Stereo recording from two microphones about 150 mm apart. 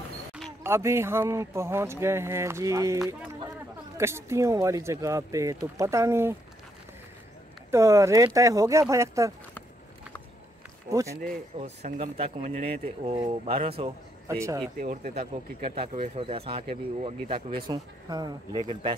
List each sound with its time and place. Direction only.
0.7 s a man's voice: 15° right (ahead or behind)
4.0 s speech: 20° right (ahead or behind)
7.7 s speech: 20° right (ahead or behind)
10.9 s speech: 20° right (ahead or behind)
11.6 s speech: 45° right (ahead or behind)
14.2 s speech: 20° right (ahead or behind)
14.8 s speech: 65° right (ahead or behind)
15.1 s speech: 40° right (ahead or behind)
17.6 s speech: 25° right (ahead or behind)